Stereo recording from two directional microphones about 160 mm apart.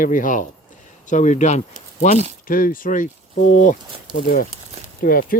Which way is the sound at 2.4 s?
60° left (ahead or behind).